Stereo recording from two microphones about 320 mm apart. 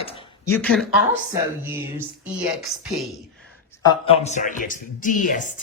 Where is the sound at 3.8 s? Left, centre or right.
Centre.